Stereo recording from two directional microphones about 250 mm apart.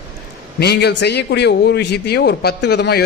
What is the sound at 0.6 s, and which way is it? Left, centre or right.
A man's voice, left.